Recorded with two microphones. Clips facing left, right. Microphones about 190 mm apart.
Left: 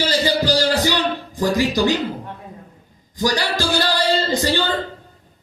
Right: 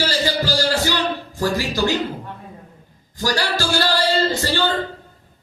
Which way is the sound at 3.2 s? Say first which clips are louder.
Left 1 dB; 15° left (ahead or behind).